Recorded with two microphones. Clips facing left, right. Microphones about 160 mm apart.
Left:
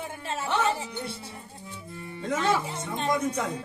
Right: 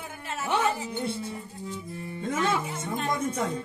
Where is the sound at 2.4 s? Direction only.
25° left (ahead or behind).